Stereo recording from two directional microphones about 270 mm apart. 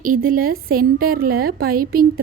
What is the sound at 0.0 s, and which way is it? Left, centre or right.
A woman's voice, right.